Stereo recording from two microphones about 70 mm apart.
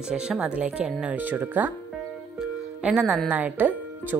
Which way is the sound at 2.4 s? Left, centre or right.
Centre.